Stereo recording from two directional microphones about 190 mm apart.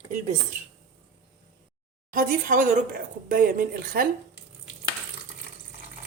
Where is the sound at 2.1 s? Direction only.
45° right (ahead or behind).